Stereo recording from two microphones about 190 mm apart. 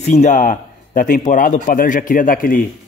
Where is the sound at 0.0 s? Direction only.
35° left (ahead or behind).